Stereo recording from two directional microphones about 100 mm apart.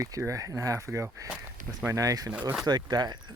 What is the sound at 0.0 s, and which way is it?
Speech, 35° right (ahead or behind).